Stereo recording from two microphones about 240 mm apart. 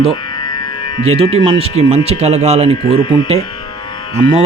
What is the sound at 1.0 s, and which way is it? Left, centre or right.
Speech, right.